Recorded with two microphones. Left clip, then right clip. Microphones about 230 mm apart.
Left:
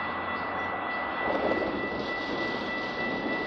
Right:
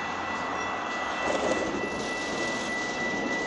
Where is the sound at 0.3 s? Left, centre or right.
Right.